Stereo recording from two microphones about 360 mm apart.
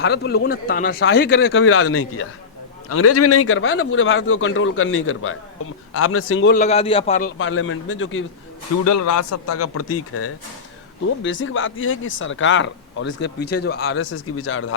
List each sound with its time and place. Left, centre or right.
0.0 s speech: left
7.3 s speech: left
8.7 s speech: left